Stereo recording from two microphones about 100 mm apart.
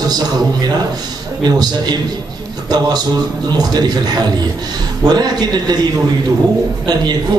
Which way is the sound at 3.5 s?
40° right (ahead or behind).